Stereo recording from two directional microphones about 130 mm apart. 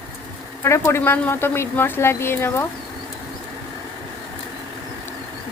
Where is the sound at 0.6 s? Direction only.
20° left (ahead or behind).